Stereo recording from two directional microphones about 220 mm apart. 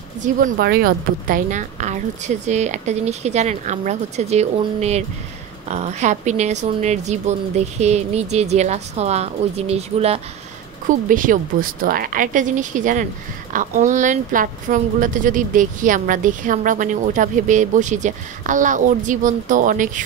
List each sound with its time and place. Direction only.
0.2 s a woman's voice: 40° right (ahead or behind)